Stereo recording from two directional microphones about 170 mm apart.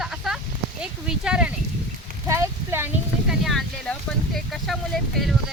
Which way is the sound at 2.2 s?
15° right (ahead or behind).